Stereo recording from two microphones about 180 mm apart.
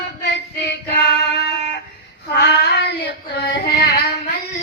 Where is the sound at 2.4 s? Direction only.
65° left (ahead or behind).